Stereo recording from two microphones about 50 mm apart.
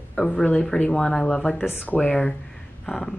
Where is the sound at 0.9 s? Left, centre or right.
Centre.